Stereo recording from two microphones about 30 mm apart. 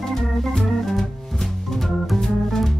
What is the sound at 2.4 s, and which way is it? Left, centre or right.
Music, centre.